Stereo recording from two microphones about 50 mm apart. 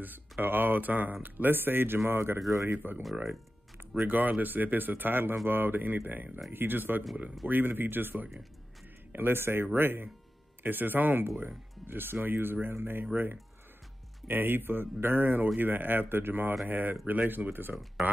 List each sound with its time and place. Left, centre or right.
0.0 s speech: right
2.0 s a man's voice: right
2.7 s speech: right
4.1 s speech: right